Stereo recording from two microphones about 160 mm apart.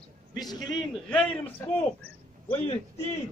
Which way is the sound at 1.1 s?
5° left (ahead or behind).